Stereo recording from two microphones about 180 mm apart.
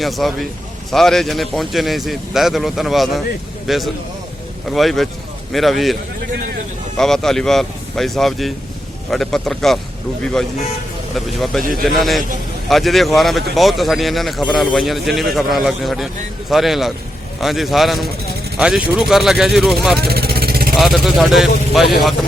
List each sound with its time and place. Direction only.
0.0 s speech: centre (ahead or behind)
11.1 s speech: centre (ahead or behind)
20.0 s vehicle: 60° right (ahead or behind)
20.7 s speech: centre (ahead or behind)